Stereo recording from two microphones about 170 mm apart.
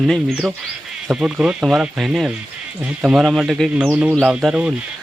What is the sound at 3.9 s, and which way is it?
Speech, 10° right (ahead or behind).